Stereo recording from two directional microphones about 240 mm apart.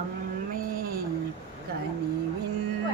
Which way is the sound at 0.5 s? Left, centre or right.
Right.